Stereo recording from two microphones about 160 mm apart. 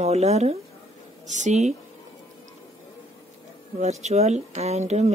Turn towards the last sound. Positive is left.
turn(degrees=-45)  # may be behind; listen again after turning